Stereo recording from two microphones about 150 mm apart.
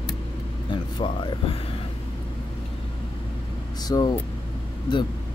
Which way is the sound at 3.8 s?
25° left (ahead or behind).